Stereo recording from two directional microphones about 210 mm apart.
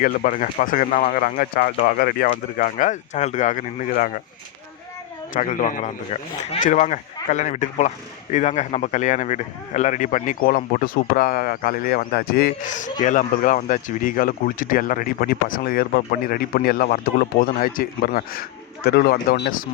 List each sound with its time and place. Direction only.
0.0 s a man's voice: 40° left (ahead or behind)
5.3 s a man's voice: 40° left (ahead or behind)